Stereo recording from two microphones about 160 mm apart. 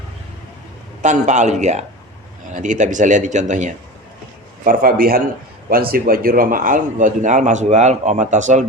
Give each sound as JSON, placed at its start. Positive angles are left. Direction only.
{"t": 1.0, "sound": "speech", "side_deg": -50}
{"t": 4.6, "sound": "a man's voice", "side_deg": -60}